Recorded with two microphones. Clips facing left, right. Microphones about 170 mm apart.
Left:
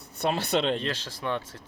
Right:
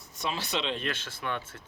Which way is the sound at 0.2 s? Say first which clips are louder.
Left 7 dB; 60° left (ahead or behind).